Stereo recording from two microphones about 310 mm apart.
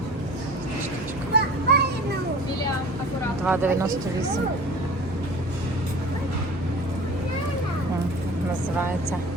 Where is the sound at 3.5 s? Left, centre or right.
Centre.